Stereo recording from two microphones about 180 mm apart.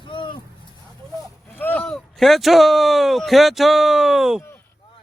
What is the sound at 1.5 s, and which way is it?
Speech, 10° left (ahead or behind).